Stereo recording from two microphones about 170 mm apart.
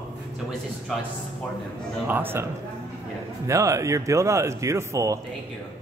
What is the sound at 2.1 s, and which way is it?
Speech, 15° right (ahead or behind).